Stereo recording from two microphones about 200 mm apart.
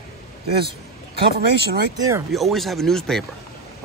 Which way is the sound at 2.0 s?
15° right (ahead or behind).